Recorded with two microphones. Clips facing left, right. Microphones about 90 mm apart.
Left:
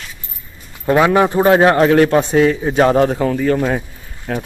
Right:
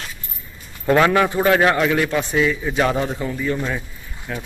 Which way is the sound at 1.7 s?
45° left (ahead or behind).